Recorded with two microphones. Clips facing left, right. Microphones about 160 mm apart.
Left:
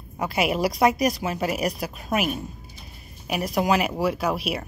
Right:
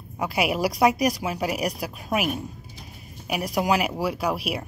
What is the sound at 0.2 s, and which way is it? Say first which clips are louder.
A woman's voice: left 1 dB; 5° right (ahead or behind).